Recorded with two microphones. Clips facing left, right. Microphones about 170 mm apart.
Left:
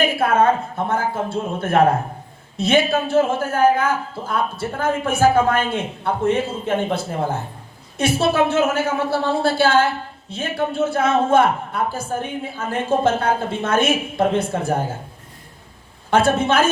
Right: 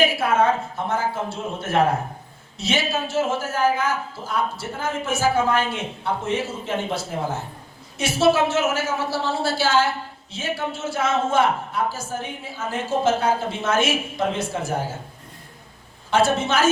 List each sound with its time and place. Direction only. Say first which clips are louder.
0.2 s a sound: left 3 dB; 55° left (ahead or behind)
0.9 s a man's voice: left 2 dB; 55° left (ahead or behind)
16.0 s a man's voice: left 3 dB; 55° left (ahead or behind)